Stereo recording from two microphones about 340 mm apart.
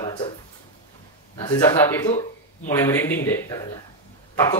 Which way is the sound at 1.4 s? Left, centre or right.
Centre.